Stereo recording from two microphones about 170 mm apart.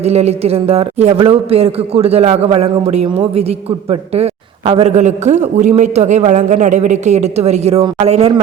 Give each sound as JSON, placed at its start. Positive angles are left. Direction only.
{"t": 0.0, "sound": "a man's voice", "side_deg": -40}